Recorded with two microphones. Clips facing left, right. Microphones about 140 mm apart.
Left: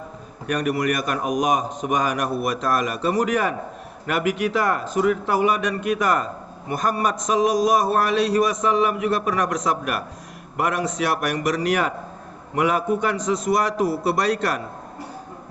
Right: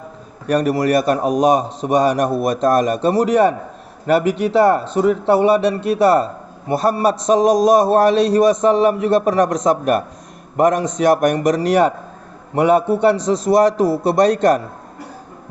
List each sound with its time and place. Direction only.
0.4 s a man's voice: 35° right (ahead or behind)